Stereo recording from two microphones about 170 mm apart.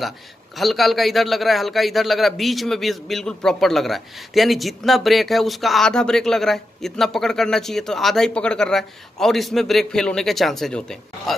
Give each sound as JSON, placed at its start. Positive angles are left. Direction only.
{"t": 0.6, "sound": "a man's voice", "side_deg": 0}